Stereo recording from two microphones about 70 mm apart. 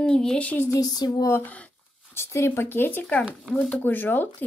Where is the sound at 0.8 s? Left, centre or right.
Left.